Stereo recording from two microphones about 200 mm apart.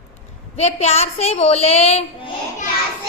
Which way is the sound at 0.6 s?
35° left (ahead or behind).